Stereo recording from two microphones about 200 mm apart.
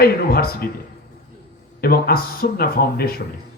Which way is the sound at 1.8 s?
50° left (ahead or behind).